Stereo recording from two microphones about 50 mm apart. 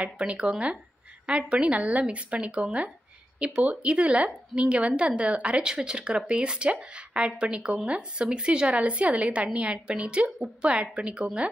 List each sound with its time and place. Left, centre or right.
0.0 s speech: centre